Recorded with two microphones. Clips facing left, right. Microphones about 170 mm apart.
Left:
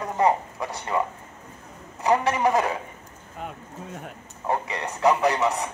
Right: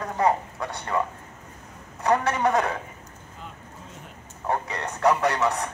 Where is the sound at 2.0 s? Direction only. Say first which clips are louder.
Left 1 dB; centre (ahead or behind).